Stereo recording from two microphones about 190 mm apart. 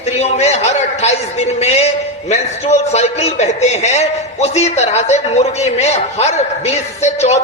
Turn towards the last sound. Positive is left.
turn(degrees=35)  # may be behind; listen again after turning